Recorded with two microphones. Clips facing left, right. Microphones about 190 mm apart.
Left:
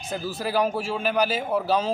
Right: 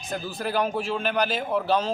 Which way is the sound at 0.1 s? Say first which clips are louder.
Left 1 dB; 5° left (ahead or behind).